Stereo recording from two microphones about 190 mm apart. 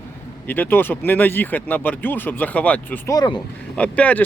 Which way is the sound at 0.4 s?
10° left (ahead or behind).